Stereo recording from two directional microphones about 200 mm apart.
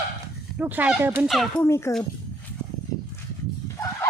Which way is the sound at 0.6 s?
10° right (ahead or behind).